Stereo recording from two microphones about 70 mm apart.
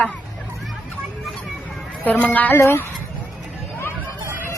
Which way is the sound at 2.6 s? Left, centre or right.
Left.